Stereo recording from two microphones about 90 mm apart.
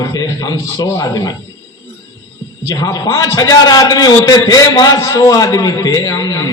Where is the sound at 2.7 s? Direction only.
40° left (ahead or behind).